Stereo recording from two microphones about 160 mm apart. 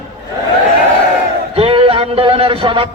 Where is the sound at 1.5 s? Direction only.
35° right (ahead or behind).